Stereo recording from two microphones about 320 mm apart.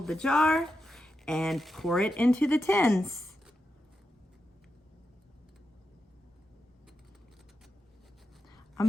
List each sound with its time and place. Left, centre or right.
0.0 s speech: centre